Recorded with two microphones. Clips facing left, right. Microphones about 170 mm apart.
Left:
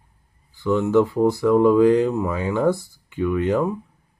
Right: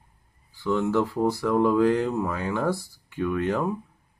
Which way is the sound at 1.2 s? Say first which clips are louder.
Left 6 dB; 15° left (ahead or behind).